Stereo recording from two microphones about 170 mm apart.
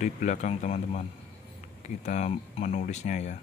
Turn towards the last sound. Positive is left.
turn(degrees=45)  # may be behind; listen again after turning